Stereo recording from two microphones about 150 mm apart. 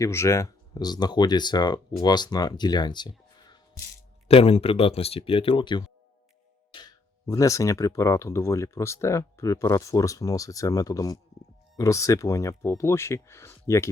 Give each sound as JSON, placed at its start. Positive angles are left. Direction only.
{"t": 0.0, "sound": "speech", "side_deg": 20}
{"t": 4.3, "sound": "speech", "side_deg": 40}